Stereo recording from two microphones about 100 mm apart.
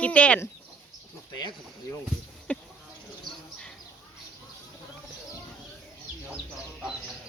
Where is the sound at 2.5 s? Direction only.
15° left (ahead or behind).